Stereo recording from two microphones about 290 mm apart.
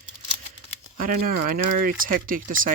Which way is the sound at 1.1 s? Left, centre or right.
Right.